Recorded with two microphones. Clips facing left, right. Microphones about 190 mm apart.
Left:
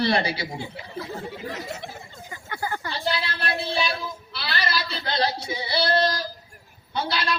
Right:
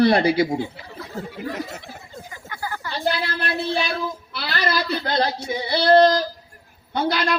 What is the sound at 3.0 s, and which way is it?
Speech, 50° right (ahead or behind).